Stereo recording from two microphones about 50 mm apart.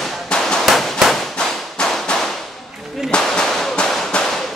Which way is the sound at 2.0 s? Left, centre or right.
Centre.